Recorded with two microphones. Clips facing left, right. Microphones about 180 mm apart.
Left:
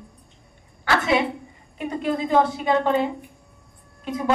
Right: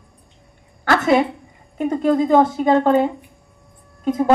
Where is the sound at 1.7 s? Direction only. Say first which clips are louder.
Right 8 dB; 45° right (ahead or behind).